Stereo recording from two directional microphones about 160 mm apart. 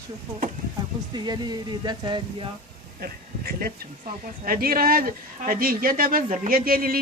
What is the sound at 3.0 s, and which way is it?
Speech, 70° right (ahead or behind).